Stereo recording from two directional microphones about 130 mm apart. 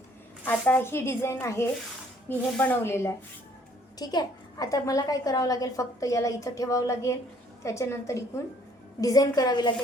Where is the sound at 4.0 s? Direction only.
30° left (ahead or behind).